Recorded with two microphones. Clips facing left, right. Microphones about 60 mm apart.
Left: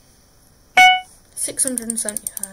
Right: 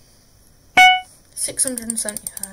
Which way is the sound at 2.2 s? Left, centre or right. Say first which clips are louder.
Even; right.